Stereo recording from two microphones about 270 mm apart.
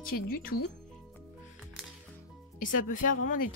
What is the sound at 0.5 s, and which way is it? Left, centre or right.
Speech, left.